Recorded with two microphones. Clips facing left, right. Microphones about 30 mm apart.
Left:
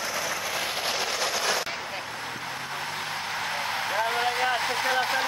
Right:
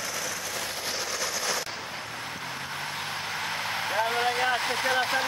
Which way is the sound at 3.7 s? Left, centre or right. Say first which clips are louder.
Even; centre.